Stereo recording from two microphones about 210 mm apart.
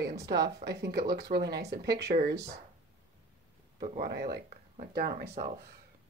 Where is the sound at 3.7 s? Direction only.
40° right (ahead or behind).